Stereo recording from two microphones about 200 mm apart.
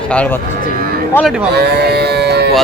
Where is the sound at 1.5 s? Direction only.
55° right (ahead or behind).